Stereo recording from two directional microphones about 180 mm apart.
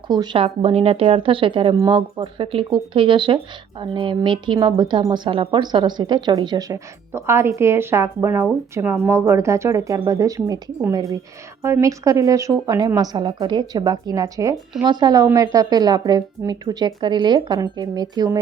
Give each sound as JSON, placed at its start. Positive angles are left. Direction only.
{"t": 0.1, "sound": "speech", "side_deg": -25}